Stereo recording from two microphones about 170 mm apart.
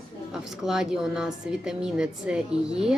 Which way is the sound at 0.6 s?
5° right (ahead or behind).